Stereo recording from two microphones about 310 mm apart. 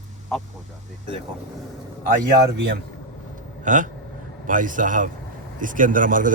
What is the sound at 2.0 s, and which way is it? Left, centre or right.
A man's voice, right.